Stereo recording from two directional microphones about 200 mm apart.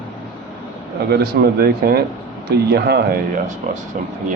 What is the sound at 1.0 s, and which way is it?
Speech, 50° right (ahead or behind).